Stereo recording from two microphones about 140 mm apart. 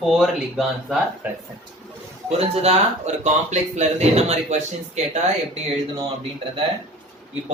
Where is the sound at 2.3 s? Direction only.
45° right (ahead or behind).